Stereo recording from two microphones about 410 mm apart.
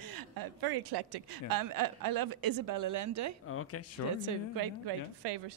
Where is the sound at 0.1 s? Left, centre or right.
Right.